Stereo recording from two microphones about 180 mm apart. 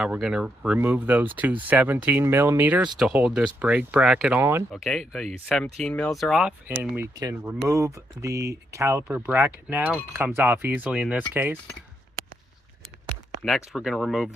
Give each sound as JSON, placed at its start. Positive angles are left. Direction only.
{"t": 0.0, "sound": "speech", "side_deg": -5}
{"t": 4.7, "sound": "speech", "side_deg": 0}
{"t": 6.9, "sound": "speech", "side_deg": -15}
{"t": 13.7, "sound": "speech", "side_deg": 0}